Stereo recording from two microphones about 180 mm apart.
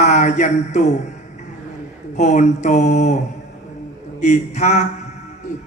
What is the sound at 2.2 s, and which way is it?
A man's voice, 40° left (ahead or behind).